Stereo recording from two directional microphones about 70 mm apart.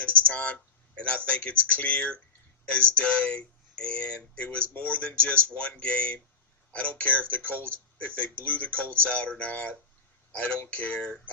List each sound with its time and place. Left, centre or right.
0.2 s speech: centre